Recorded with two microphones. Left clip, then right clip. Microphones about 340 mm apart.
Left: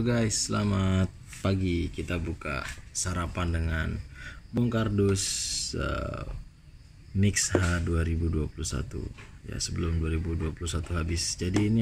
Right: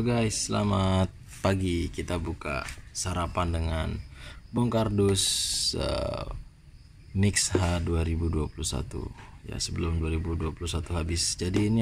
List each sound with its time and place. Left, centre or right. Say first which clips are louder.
0.0 s speech: even; centre